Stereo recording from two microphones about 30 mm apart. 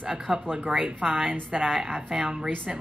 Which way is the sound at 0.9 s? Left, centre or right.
Right.